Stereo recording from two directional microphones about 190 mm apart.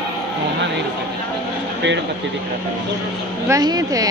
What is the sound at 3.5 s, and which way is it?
Speech, 20° right (ahead or behind).